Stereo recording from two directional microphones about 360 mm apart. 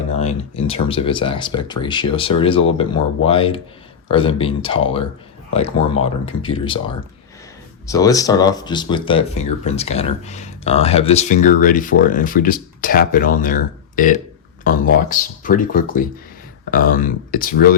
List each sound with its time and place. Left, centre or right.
0.2 s speech: centre